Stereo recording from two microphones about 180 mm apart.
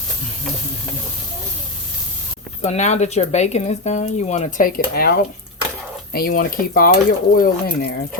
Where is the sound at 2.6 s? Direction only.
40° left (ahead or behind).